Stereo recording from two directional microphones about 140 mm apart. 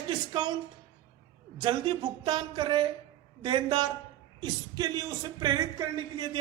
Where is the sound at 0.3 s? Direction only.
30° right (ahead or behind).